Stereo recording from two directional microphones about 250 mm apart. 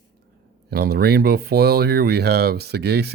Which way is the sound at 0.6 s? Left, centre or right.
Right.